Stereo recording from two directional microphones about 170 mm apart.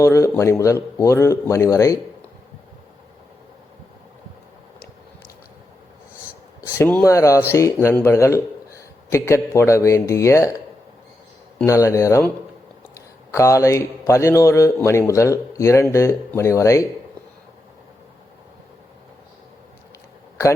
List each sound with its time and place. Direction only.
0.0 s a man's voice: 15° left (ahead or behind)
6.7 s a man's voice: 15° left (ahead or behind)
11.5 s a man's voice: 15° left (ahead or behind)
13.3 s a man's voice: 20° left (ahead or behind)